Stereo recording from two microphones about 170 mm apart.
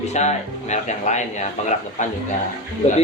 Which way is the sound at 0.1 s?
45° left (ahead or behind).